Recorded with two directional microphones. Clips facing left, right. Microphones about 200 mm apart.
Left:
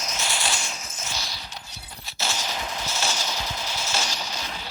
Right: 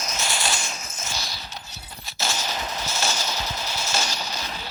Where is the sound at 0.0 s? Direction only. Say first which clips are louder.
Right 1 dB; 45° right (ahead or behind).